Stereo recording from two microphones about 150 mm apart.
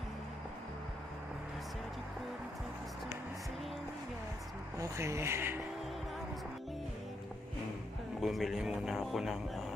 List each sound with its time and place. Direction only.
4.7 s speech: 20° right (ahead or behind)
8.2 s speech: centre (ahead or behind)